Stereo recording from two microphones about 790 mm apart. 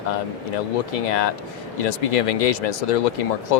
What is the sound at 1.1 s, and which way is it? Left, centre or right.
Speech, left.